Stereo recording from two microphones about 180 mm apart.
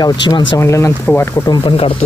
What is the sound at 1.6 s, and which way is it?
Speech, 30° left (ahead or behind).